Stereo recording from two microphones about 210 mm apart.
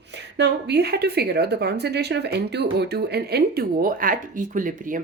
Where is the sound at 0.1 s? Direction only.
55° right (ahead or behind).